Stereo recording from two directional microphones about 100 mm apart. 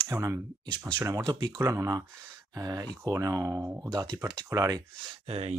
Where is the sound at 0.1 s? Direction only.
25° right (ahead or behind).